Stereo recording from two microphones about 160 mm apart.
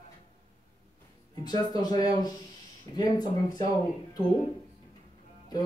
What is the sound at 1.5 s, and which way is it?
Speech, 25° left (ahead or behind).